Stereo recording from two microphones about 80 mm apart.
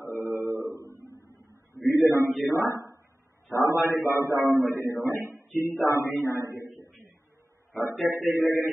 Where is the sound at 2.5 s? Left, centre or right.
Right.